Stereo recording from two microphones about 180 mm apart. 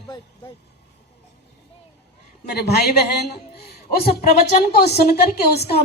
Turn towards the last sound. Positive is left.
turn(degrees=65)  # may be behind; listen again after turning